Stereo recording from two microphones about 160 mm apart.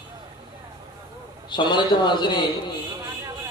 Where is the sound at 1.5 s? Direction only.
30° left (ahead or behind).